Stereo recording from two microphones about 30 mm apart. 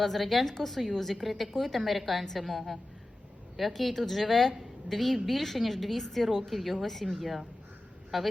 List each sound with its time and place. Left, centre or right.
0.0 s a woman's voice: centre
3.8 s a woman's voice: centre
8.1 s a woman's voice: centre